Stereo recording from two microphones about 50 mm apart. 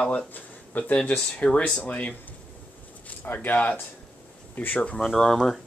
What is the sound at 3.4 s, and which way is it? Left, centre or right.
Speech, left.